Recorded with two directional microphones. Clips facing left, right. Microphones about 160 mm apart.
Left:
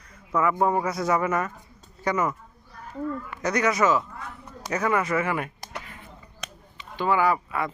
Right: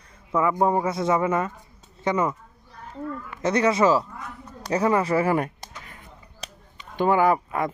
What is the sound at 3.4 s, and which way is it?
Speech, 30° right (ahead or behind).